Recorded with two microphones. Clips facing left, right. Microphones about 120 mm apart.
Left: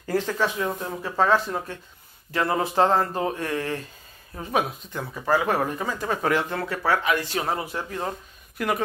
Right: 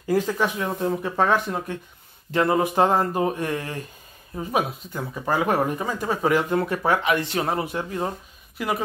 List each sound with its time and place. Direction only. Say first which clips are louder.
0.0 s speech: right 2 dB; 15° right (ahead or behind)
0.6 s speech: right 3 dB; 30° right (ahead or behind); by 6.4 s 10° right (ahead or behind)
6.5 s speech: right 3 dB; 25° right (ahead or behind)
8.5 s speech: even; 5° right (ahead or behind)